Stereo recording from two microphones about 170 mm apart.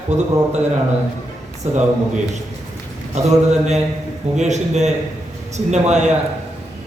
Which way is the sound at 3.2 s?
40° right (ahead or behind).